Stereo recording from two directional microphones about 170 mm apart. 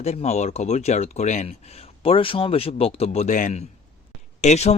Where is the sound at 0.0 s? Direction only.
40° left (ahead or behind).